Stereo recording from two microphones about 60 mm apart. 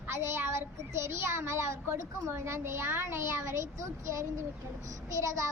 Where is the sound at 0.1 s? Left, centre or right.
Right.